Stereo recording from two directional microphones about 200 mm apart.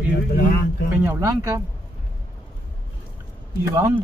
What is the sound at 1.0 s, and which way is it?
Speech, 15° right (ahead or behind).